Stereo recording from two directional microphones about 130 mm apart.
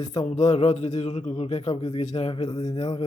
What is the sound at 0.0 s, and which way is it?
Speech, 55° left (ahead or behind).